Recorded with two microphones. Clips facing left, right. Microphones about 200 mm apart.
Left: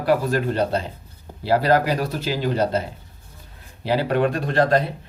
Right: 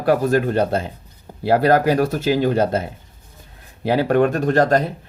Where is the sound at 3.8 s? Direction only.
50° right (ahead or behind).